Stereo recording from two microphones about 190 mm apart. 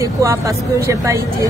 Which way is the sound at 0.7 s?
15° right (ahead or behind).